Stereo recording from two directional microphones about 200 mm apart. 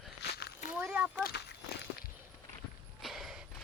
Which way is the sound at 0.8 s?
Centre (ahead or behind).